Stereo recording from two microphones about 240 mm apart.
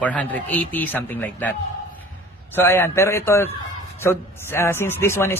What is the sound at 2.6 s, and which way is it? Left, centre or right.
Speech, centre.